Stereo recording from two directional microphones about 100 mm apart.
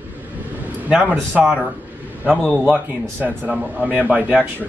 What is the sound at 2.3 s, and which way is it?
Speech, 10° left (ahead or behind).